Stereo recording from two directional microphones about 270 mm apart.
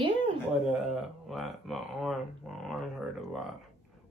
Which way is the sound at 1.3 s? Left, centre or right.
Centre.